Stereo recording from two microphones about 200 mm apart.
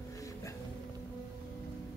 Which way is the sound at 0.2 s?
15° left (ahead or behind).